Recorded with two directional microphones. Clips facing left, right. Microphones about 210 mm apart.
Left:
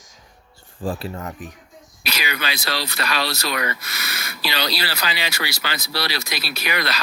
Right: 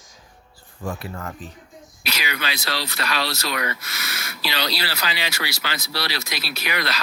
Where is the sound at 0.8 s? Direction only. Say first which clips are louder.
Left 3 dB; 25° left (ahead or behind).